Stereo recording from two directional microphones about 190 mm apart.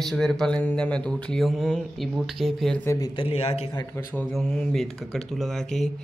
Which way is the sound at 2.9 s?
20° left (ahead or behind).